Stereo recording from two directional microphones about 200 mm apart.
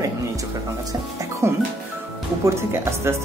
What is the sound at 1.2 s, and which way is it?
Speech, 15° right (ahead or behind).